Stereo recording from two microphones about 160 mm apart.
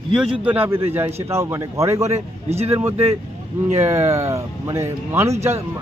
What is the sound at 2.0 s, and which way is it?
Speech, 40° right (ahead or behind).